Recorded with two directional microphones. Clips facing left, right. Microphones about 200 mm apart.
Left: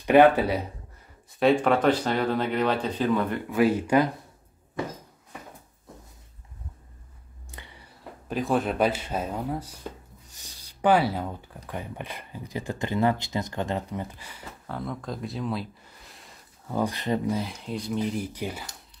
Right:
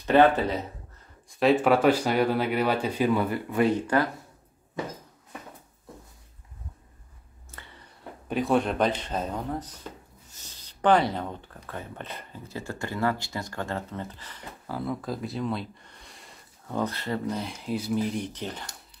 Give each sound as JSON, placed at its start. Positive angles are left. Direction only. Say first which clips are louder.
{"t": 0.0, "sound": "speech", "louder": "left 2 dB", "side_deg": 15}
{"t": 1.4, "sound": "speech", "louder": "even", "side_deg": -5}
{"t": 7.5, "sound": "chewing", "louder": "left 1 dB", "side_deg": 15}
{"t": 8.0, "sound": "speech", "louder": "right 1 dB", "side_deg": 0}
{"t": 14.7, "sound": "speech", "louder": "right 2 dB", "side_deg": -5}
{"t": 17.3, "sound": "speech", "louder": "left 1 dB", "side_deg": 0}